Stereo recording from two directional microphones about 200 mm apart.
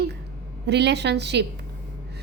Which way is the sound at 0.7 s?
60° right (ahead or behind).